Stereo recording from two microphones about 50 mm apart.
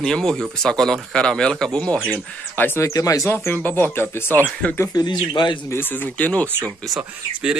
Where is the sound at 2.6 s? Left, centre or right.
Left.